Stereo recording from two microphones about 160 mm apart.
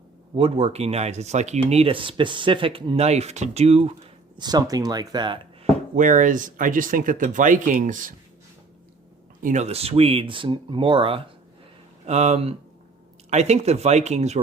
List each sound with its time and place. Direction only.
0.3 s speech: 35° right (ahead or behind)
4.4 s speech: 25° right (ahead or behind)
6.0 s speech: 55° right (ahead or behind)
9.4 s speech: 50° right (ahead or behind)
12.0 s speech: 45° right (ahead or behind)